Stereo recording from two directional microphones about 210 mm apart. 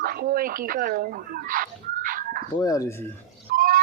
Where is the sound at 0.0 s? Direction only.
45° right (ahead or behind).